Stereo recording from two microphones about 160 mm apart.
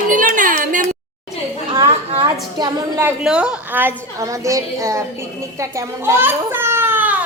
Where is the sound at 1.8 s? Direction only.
35° right (ahead or behind).